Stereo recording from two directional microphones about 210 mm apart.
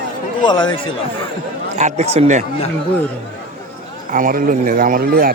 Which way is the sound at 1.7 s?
35° right (ahead or behind).